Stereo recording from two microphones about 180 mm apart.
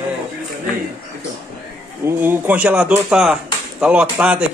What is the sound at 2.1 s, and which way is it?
Speech, 10° right (ahead or behind).